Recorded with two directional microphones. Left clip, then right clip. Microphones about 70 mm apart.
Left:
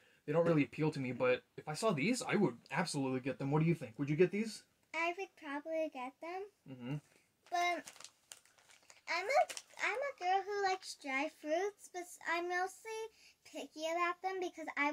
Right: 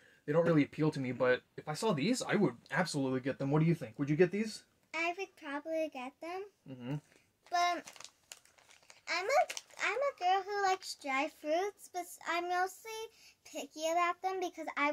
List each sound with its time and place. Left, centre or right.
0.2 s speech: left
4.9 s child singing: right
6.7 s speech: left
7.4 s a child's voice: right
7.8 s a sound: centre
9.0 s a child's voice: right